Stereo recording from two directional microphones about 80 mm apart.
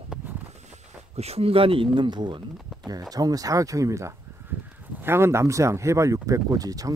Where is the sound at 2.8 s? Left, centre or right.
Right.